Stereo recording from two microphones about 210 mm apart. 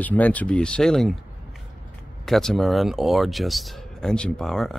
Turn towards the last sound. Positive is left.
turn(degrees=0)  # may be behind; listen again after turning